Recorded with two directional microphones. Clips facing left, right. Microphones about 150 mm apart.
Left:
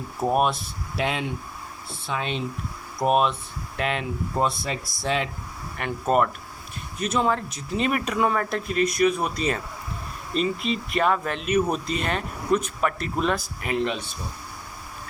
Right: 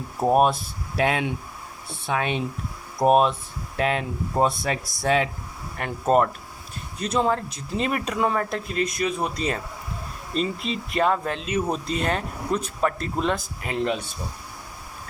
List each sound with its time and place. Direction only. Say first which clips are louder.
0.3 s speech: right 4 dB; 45° right (ahead or behind)
3.0 s speech: right 3 dB; 40° right (ahead or behind)
4.4 s speech: right 3 dB; 55° right (ahead or behind)
5.7 s speech: right 2 dB; 35° right (ahead or behind)